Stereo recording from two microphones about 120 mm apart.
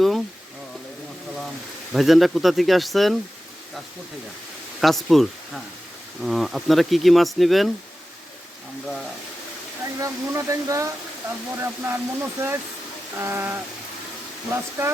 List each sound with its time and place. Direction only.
1.9 s speech: centre (ahead or behind)
4.8 s speech: centre (ahead or behind)
9.8 s speech: 25° right (ahead or behind)